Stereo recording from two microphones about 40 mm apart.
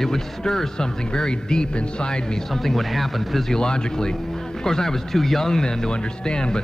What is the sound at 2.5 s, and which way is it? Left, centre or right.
Speech, centre.